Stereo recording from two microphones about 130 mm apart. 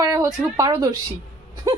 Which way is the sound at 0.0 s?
30° right (ahead or behind).